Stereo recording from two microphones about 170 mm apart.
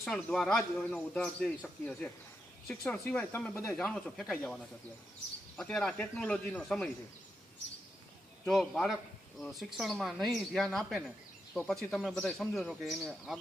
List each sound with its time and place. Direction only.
0.0 s speech: 5° left (ahead or behind)
8.4 s speech: centre (ahead or behind)